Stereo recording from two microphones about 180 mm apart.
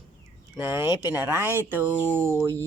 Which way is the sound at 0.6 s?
15° right (ahead or behind).